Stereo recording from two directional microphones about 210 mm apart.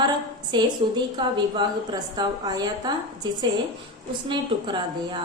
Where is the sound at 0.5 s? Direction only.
20° right (ahead or behind).